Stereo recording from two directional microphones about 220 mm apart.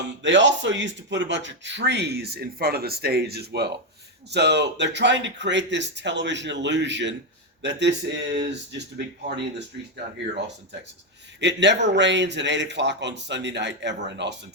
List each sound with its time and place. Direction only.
0.2 s speech: 55° right (ahead or behind)
11.3 s speech: 55° right (ahead or behind)